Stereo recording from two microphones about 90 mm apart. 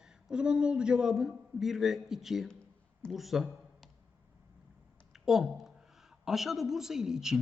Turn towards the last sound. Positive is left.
turn(degrees=-5)  # may be behind; listen again after turning